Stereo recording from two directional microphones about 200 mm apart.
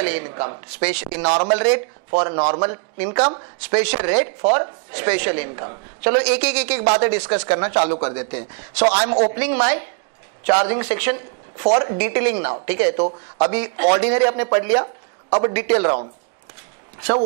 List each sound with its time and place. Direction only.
0.0 s speech: 15° right (ahead or behind)
2.0 s speech: 30° right (ahead or behind)
2.7 s a man's voice: 15° right (ahead or behind)
12.0 s speech: 10° right (ahead or behind)
12.9 s speech: 25° right (ahead or behind)
13.5 s a man's voice: 10° right (ahead or behind)